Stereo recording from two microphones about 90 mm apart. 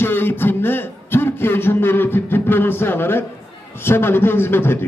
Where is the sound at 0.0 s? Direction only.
25° left (ahead or behind).